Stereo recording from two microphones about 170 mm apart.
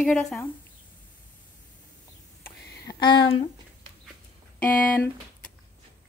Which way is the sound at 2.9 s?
25° left (ahead or behind).